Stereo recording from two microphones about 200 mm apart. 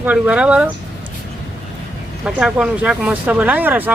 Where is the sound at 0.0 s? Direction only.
5° right (ahead or behind).